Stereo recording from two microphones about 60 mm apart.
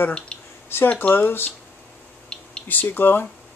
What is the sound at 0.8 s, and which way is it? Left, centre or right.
Speech, left.